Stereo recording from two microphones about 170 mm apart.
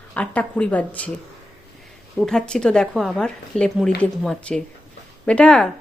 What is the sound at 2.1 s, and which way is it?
A woman's voice, 5° left (ahead or behind).